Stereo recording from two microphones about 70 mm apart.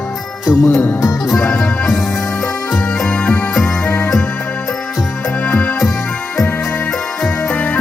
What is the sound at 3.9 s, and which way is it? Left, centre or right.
Music, left.